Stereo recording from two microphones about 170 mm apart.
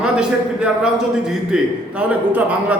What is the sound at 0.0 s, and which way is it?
A man's voice, 5° right (ahead or behind).